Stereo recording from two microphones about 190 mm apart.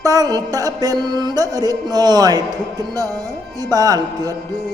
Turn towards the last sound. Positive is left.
turn(degrees=-20)  # may be behind; listen again after turning